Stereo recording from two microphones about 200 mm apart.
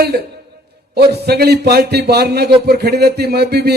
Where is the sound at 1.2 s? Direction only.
50° right (ahead or behind).